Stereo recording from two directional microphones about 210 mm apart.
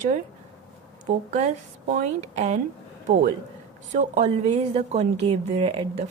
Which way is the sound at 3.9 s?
35° right (ahead or behind).